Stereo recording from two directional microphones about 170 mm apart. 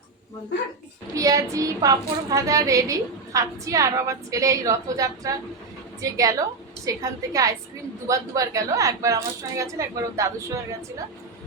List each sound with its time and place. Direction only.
1.1 s a woman's voice: 20° right (ahead or behind)